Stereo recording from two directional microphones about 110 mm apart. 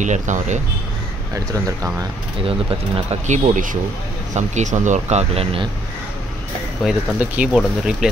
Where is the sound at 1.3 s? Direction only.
30° right (ahead or behind).